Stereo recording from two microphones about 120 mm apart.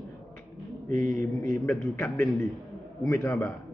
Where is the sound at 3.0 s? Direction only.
25° left (ahead or behind).